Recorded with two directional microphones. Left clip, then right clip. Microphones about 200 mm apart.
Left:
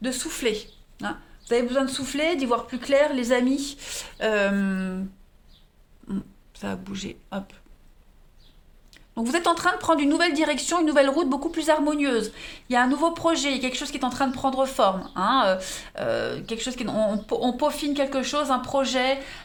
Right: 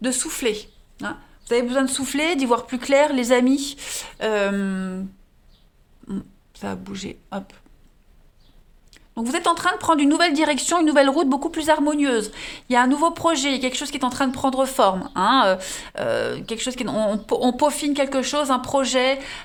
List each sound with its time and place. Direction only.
0.0 s speech: 45° right (ahead or behind); by 5.0 s 20° right (ahead or behind)
6.1 s speech: 20° right (ahead or behind)
8.9 s speech: 20° right (ahead or behind); by 19.4 s 35° right (ahead or behind)